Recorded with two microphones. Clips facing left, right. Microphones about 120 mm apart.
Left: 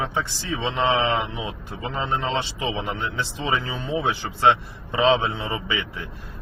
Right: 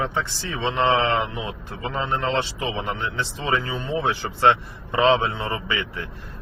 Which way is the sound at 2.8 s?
15° left (ahead or behind).